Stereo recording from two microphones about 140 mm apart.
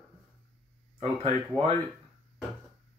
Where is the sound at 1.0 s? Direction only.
40° right (ahead or behind).